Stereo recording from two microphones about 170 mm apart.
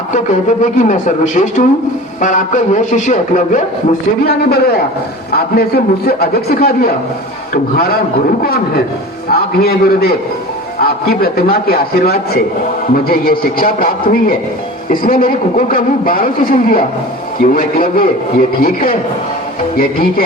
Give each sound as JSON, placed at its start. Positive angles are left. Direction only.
{"t": 0.6, "sound": "a man's voice", "side_deg": 45}
{"t": 4.3, "sound": "a man's voice", "side_deg": 65}
{"t": 9.3, "sound": "a man's voice", "side_deg": 65}
{"t": 19.7, "sound": "a man's voice", "side_deg": 60}